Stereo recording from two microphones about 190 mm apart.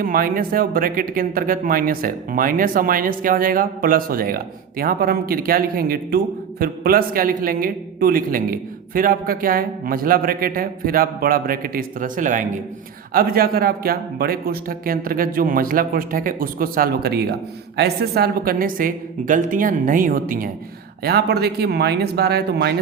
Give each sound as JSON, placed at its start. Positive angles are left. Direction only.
{"t": 0.0, "sound": "speech", "side_deg": -50}
{"t": 21.0, "sound": "speech", "side_deg": -55}